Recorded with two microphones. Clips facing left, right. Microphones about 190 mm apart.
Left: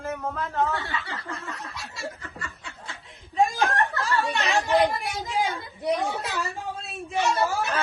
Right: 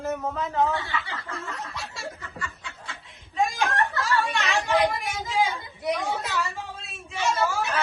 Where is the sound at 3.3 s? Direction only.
35° left (ahead or behind).